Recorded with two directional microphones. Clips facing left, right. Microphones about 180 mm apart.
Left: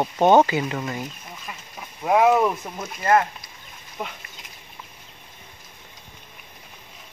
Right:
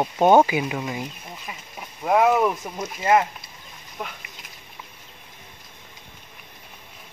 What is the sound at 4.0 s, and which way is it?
Speech, 5° left (ahead or behind).